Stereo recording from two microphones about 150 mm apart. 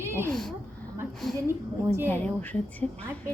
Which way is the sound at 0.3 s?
5° left (ahead or behind).